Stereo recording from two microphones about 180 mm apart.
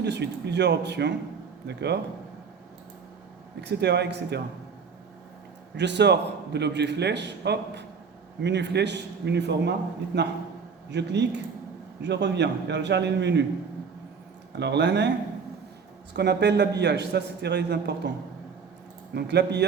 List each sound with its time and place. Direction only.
0.0 s a man's voice: 70° right (ahead or behind)
3.6 s a man's voice: 70° right (ahead or behind)
5.7 s a man's voice: 75° right (ahead or behind)
10.9 s a man's voice: 70° right (ahead or behind)
14.5 s a man's voice: 70° right (ahead or behind)
16.1 s a man's voice: 70° right (ahead or behind)
19.1 s a man's voice: 70° right (ahead or behind)